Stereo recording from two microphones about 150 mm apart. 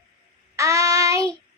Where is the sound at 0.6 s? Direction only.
20° right (ahead or behind).